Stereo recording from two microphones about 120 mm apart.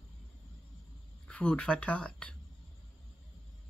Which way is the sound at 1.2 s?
10° left (ahead or behind).